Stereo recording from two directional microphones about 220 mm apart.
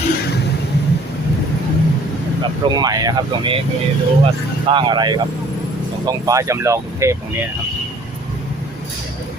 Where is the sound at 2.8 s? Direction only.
15° right (ahead or behind).